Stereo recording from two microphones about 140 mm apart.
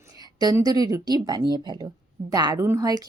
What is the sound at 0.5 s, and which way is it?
A woman's voice, 25° right (ahead or behind).